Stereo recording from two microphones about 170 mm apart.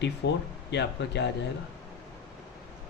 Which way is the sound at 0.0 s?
90° left.